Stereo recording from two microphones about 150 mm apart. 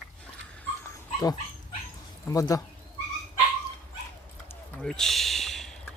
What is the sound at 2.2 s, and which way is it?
Speech, 25° left (ahead or behind).